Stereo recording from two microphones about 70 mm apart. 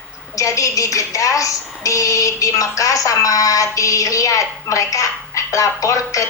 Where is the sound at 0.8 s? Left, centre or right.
Left.